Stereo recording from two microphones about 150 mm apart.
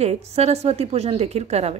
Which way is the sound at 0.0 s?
45° right (ahead or behind).